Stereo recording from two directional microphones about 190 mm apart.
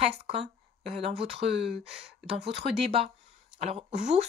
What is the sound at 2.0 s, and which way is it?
Speech, 30° right (ahead or behind).